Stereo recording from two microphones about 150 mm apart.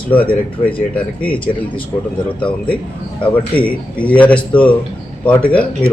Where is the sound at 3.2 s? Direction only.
10° left (ahead or behind).